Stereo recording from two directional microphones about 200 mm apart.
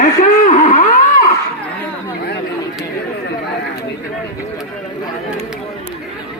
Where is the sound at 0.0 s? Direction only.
40° left (ahead or behind).